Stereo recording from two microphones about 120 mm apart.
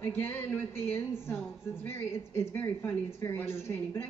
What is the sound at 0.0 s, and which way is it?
A woman's voice, 15° left (ahead or behind).